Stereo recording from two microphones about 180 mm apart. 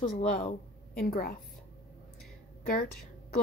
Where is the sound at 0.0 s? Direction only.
45° left (ahead or behind).